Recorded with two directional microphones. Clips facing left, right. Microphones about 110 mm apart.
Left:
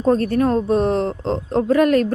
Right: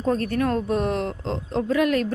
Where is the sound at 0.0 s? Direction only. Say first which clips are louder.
Left 6 dB; 35° left (ahead or behind).